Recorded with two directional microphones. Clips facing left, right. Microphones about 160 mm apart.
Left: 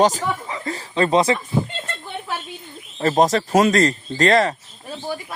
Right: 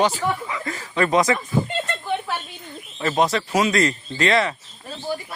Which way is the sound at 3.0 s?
40° left (ahead or behind).